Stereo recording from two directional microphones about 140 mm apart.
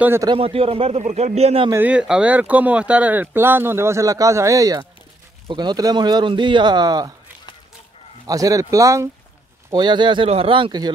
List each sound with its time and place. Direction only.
0.0 s speech: 15° right (ahead or behind)
0.3 s a man's voice: 40° right (ahead or behind)
1.7 s speech: 10° right (ahead or behind); by 7.2 s 30° right (ahead or behind)
8.3 s speech: 25° right (ahead or behind)
9.7 s speech: 35° right (ahead or behind)